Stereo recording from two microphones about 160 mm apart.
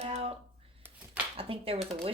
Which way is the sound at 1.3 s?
35° right (ahead or behind).